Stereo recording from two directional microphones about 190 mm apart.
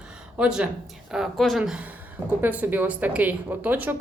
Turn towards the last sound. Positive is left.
turn(degrees=-10)  # may be behind; listen again after turning